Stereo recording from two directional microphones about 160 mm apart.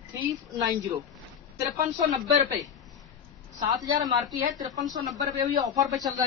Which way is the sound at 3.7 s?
25° right (ahead or behind).